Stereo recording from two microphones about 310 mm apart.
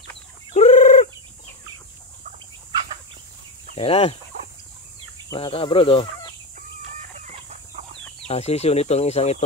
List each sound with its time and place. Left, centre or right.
0.5 s fowl: left
3.7 s speech: centre
5.3 s speech: centre
7.0 s chicken: right
8.3 s speech: centre